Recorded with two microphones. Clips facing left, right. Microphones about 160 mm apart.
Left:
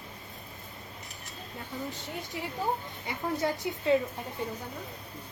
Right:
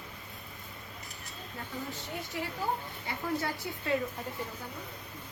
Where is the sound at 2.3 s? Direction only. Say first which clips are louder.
Left 2 dB; 20° left (ahead or behind).